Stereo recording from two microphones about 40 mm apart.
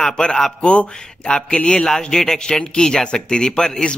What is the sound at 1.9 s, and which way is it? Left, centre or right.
Speech, centre.